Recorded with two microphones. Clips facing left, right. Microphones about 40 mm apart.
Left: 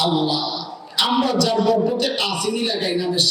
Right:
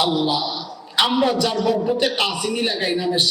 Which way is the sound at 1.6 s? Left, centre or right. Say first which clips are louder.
Left 1 dB; centre.